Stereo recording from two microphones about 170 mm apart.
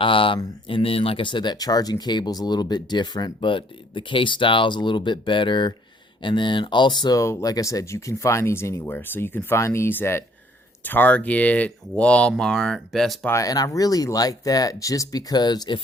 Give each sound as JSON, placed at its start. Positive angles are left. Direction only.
{"t": 0.0, "sound": "speech", "side_deg": 30}
{"t": 13.2, "sound": "speech", "side_deg": 20}